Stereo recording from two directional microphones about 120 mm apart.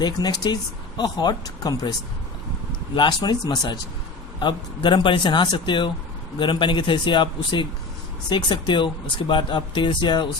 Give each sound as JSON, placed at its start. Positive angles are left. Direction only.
{"t": 0.0, "sound": "speech", "side_deg": 35}